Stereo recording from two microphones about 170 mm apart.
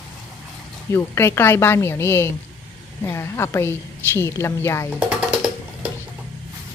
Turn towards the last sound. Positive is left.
turn(degrees=-5)  # may be behind; listen again after turning